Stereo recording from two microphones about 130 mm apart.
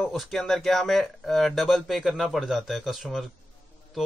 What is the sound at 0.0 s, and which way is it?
A man's voice, centre (ahead or behind).